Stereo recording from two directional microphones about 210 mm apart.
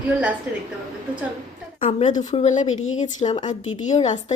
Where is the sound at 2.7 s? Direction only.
75° left (ahead or behind).